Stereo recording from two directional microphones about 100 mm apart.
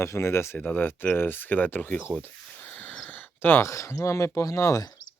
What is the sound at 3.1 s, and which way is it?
Speech, 20° left (ahead or behind).